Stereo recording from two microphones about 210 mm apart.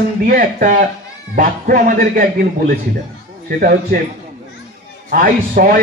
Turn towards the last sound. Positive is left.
turn(degrees=-40)  # may be behind; listen again after turning